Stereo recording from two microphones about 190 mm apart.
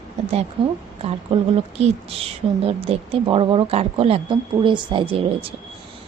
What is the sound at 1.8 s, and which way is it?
A woman's voice, 30° right (ahead or behind).